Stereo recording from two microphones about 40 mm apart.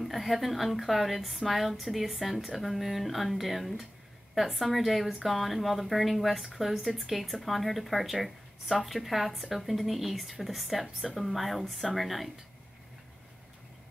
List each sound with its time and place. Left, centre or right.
0.0 s a woman's voice: centre